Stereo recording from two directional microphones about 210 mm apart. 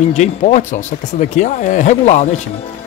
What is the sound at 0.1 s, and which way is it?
Speech, 35° left (ahead or behind).